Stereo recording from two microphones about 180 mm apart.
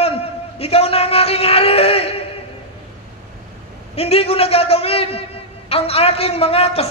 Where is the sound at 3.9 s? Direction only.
35° left (ahead or behind).